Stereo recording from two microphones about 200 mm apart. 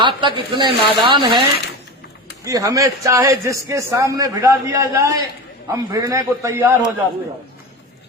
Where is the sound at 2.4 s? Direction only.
15° right (ahead or behind).